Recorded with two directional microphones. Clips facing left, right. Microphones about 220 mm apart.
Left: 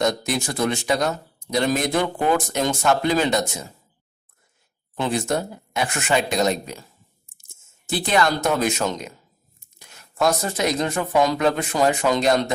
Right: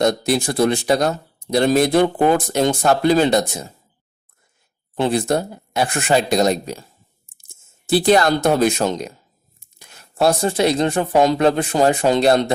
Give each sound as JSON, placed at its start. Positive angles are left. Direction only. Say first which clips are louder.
{"t": 0.3, "sound": "speech", "louder": "right 6 dB", "side_deg": -35}
{"t": 4.9, "sound": "speech", "louder": "right 5 dB", "side_deg": -35}
{"t": 7.9, "sound": "speech", "louder": "right 6 dB", "side_deg": -35}